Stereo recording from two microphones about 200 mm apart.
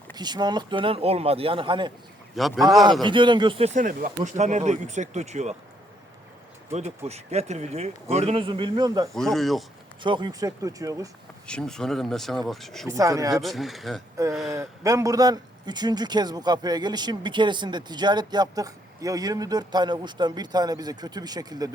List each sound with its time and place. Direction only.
0.1 s a man's voice: 20° right (ahead or behind)
2.4 s speech: centre (ahead or behind)
3.0 s speech: 25° right (ahead or behind)
6.7 s a man's voice: 35° right (ahead or behind)
9.1 s speech: centre (ahead or behind)
10.0 s speech: 25° right (ahead or behind)
11.4 s speech: 5° left (ahead or behind)
12.9 s speech: 15° right (ahead or behind)
13.3 s speech: centre (ahead or behind)
14.5 s a man's voice: 15° right (ahead or behind)